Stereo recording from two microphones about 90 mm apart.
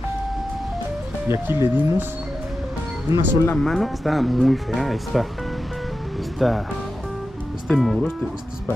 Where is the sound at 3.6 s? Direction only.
5° left (ahead or behind).